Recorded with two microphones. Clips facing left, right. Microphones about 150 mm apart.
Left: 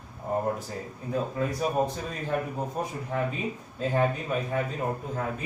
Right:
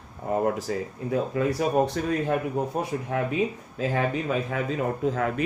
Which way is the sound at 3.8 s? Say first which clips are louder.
Right 1 dB; 90° right.